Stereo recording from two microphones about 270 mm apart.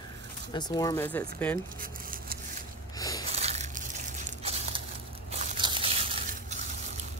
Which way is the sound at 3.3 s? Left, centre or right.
Right.